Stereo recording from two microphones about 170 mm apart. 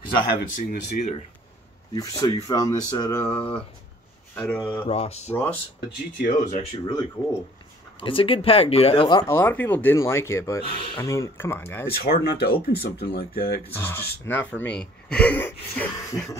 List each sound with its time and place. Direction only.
0.2 s speech: 55° left (ahead or behind)
2.0 s speech: 20° left (ahead or behind)
3.3 s speech: 10° left (ahead or behind)
4.8 s a sound: 35° left (ahead or behind)
5.3 s speech: 10° left (ahead or behind)
6.5 s speech: 25° left (ahead or behind)
12.0 s speech: 65° left (ahead or behind)
13.7 s speech: 15° left (ahead or behind)